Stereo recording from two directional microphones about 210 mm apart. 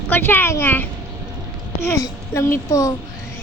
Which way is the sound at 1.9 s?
15° left (ahead or behind).